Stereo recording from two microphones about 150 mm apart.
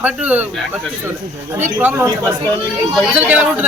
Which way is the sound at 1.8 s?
15° right (ahead or behind).